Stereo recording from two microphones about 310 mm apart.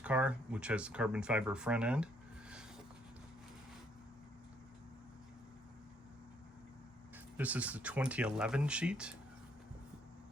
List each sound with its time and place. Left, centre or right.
0.0 s speech: centre
7.3 s speech: centre